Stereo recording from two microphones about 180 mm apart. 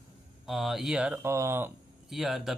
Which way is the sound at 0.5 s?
Centre (ahead or behind).